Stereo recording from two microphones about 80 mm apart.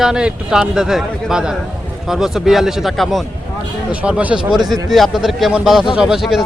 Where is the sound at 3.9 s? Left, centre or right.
Centre.